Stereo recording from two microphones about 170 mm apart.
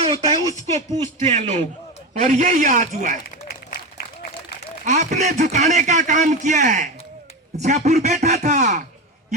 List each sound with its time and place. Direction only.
0.0 s a sound: 40° right (ahead or behind)
1.3 s a man's voice: 45° right (ahead or behind)
4.9 s a man's voice: 45° right (ahead or behind)